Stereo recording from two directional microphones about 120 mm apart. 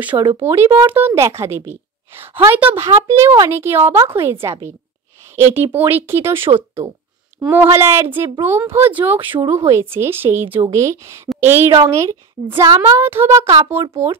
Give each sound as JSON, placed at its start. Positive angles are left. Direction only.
{"t": 0.4, "sound": "speech", "side_deg": -20}